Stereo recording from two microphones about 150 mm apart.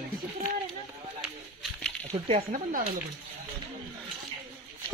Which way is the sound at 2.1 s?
40° right (ahead or behind).